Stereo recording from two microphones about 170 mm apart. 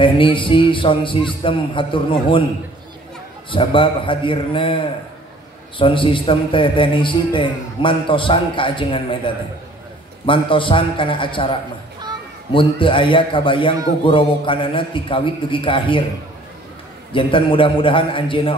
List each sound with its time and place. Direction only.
0.0 s a man's voice: 30° left (ahead or behind)
3.4 s a man's voice: 30° left (ahead or behind)
12.5 s a man's voice: 30° left (ahead or behind)
17.1 s a man's voice: 30° left (ahead or behind)